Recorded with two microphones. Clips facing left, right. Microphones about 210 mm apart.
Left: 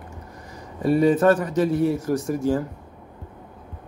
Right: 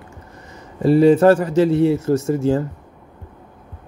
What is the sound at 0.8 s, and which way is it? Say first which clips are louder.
Speech: right 5 dB; 30° right (ahead or behind).